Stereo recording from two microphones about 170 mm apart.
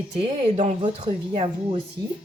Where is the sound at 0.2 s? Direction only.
35° right (ahead or behind).